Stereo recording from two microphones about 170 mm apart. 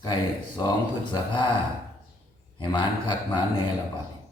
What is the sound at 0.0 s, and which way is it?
Speech, 25° left (ahead or behind).